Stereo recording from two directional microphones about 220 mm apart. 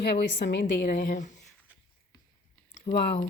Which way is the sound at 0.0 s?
50° left (ahead or behind).